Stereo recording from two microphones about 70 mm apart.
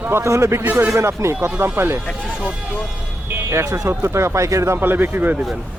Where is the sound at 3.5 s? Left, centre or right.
Right.